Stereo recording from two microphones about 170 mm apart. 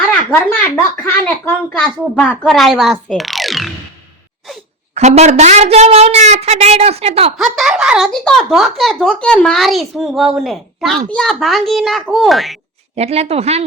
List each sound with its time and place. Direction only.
1.0 s speech: 10° left (ahead or behind)
4.9 s a woman's voice: 40° right (ahead or behind)
7.3 s speech: centre (ahead or behind)
13.0 s a woman's voice: 40° right (ahead or behind)